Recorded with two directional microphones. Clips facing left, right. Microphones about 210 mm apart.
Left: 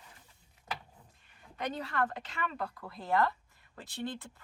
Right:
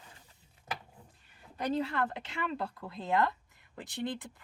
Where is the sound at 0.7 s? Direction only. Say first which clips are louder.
Right 1 dB; 20° right (ahead or behind).